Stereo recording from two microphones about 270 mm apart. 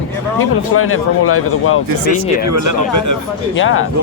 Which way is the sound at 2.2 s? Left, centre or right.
Right.